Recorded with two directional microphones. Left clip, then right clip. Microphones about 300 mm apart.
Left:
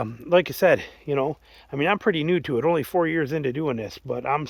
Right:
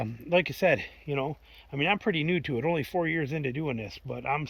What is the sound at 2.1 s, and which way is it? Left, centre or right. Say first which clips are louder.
Speech: left 5 dB; centre.